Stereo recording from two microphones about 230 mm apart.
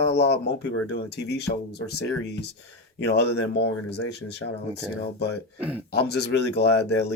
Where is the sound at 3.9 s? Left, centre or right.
Left.